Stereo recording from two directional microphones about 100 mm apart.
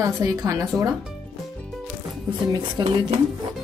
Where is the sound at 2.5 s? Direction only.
40° right (ahead or behind).